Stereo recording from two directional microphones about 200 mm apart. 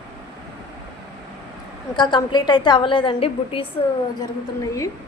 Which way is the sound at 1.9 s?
20° left (ahead or behind).